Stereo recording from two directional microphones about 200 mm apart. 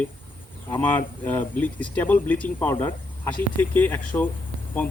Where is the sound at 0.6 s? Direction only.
10° left (ahead or behind).